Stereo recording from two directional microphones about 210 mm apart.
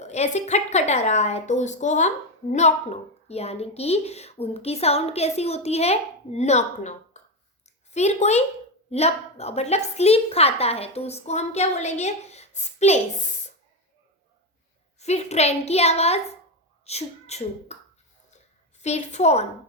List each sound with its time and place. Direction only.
0.0 s a woman's voice: 30° left (ahead or behind)
14.9 s a woman's voice: 30° left (ahead or behind)
18.8 s a woman's voice: 30° left (ahead or behind)